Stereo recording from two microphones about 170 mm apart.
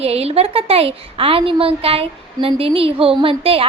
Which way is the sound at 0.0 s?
35° right (ahead or behind).